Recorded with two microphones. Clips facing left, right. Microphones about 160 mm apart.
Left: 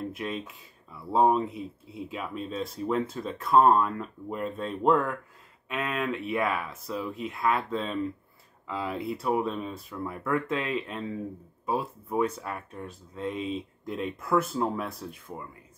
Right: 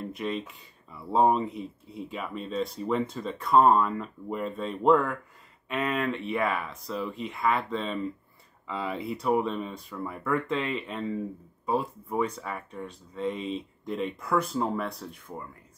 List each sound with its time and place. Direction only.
0.1 s speech: centre (ahead or behind)